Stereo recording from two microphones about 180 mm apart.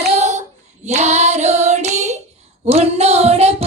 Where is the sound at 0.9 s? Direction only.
40° right (ahead or behind).